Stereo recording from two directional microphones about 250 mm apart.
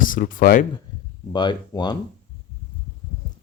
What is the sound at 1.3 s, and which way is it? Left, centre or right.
Speech, centre.